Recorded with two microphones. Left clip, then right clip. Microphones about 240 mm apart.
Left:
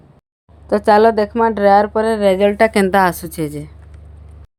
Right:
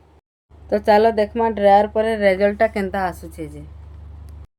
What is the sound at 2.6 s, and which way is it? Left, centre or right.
A woman's voice, left.